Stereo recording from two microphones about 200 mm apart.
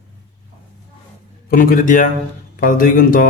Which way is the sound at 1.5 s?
45° left (ahead or behind).